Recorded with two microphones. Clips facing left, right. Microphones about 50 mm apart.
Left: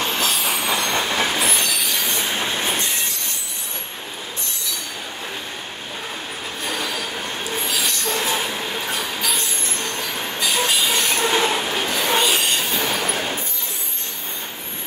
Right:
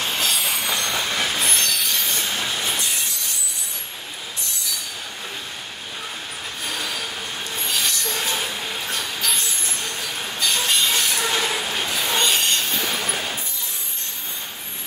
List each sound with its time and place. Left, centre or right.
0.0 s train: centre
1.0 s train: centre
1.4 s train: centre
2.2 s train: left
6.6 s train wheels squealing: centre
7.9 s train: left
8.3 s train: centre
9.8 s vehicle: centre
10.4 s train: centre
11.0 s train: left
12.2 s train wheels squealing: centre
12.8 s a sound: left